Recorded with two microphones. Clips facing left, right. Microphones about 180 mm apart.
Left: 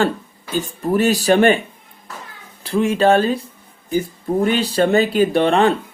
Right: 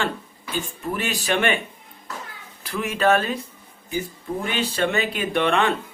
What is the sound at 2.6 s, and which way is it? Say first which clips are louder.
Speech: left 6 dB; 30° left (ahead or behind).